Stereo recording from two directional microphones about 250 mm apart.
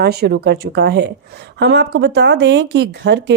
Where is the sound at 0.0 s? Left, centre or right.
Right.